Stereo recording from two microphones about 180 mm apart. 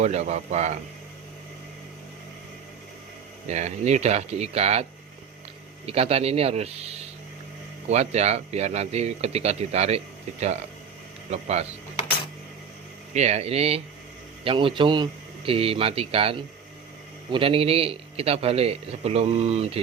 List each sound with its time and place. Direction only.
0.0 s a man's voice: 40° right (ahead or behind)
3.5 s a man's voice: 40° right (ahead or behind)
11.3 s a man's voice: 35° right (ahead or behind)
13.1 s a man's voice: 40° right (ahead or behind)